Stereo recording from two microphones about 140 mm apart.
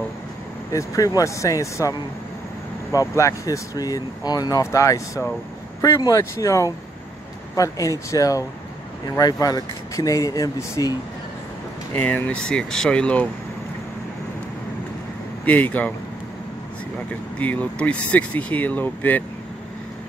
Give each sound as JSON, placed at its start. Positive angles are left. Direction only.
{"t": 0.7, "sound": "speech", "side_deg": 25}
{"t": 11.9, "sound": "speech", "side_deg": 10}
{"t": 15.4, "sound": "speech", "side_deg": 10}
{"t": 17.4, "sound": "speech", "side_deg": 10}